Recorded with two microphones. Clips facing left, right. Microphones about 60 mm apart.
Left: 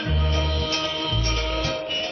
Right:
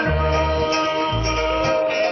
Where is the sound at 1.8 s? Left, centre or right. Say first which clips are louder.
Right 10 dB; right.